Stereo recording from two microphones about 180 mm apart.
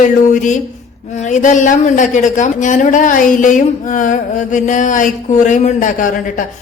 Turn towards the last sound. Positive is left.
turn(degrees=45)  # may be behind; listen again after turning